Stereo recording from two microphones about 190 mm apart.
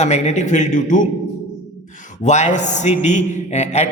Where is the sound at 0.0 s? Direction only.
35° left (ahead or behind).